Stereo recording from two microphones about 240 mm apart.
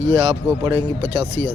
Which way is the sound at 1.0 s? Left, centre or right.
Right.